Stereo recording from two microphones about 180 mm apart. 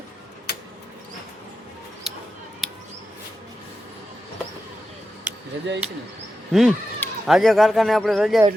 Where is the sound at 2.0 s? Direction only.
Centre (ahead or behind).